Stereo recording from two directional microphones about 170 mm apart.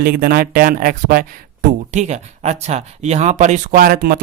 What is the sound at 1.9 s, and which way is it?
Speech, 40° right (ahead or behind).